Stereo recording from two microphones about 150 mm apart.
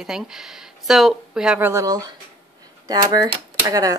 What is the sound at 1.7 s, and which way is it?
Speech, 20° right (ahead or behind).